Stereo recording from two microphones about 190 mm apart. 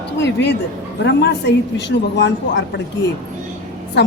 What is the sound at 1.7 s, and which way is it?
Speech, 70° left (ahead or behind).